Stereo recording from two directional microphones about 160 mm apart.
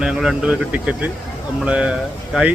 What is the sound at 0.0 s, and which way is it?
Speech, 5° right (ahead or behind).